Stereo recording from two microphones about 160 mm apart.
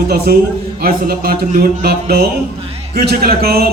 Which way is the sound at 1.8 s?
75° right (ahead or behind).